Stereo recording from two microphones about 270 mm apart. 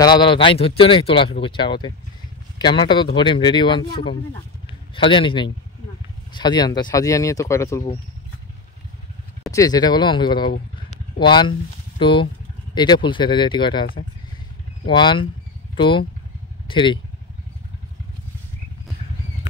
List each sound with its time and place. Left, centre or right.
0.0 s speech: centre
4.9 s speech: centre
9.5 s speech: centre
14.9 s speech: centre